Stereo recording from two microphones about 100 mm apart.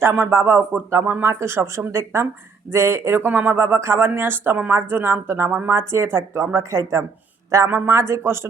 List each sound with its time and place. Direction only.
0.0 s speech: 20° right (ahead or behind)
7.7 s a man's voice: 15° right (ahead or behind)
7.9 s speech: 25° right (ahead or behind)